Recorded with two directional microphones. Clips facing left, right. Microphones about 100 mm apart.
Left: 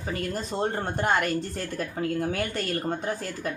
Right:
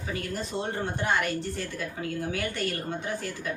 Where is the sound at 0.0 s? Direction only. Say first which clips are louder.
Left 2 dB; 40° left (ahead or behind).